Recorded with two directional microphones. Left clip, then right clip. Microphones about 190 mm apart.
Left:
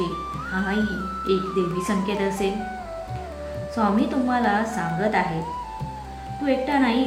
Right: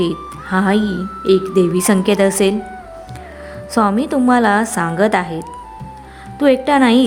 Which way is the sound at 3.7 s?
55° right (ahead or behind).